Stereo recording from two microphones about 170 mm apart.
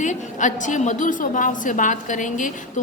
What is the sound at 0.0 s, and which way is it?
A woman's voice, 45° left (ahead or behind).